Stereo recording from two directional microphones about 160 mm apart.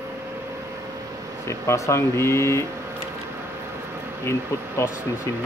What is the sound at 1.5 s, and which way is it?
Speech, 20° left (ahead or behind).